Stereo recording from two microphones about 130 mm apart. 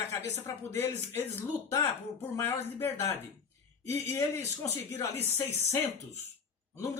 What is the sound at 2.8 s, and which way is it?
Speech, 20° left (ahead or behind).